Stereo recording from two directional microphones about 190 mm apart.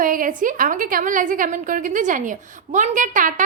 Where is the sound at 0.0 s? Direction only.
45° right (ahead or behind).